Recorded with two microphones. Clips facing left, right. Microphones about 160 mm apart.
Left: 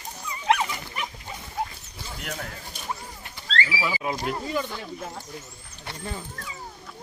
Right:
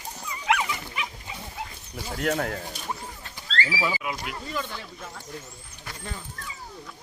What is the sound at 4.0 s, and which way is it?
Speech, 35° left (ahead or behind).